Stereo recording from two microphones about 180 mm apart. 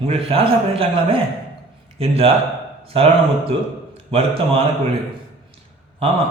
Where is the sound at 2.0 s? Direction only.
30° right (ahead or behind).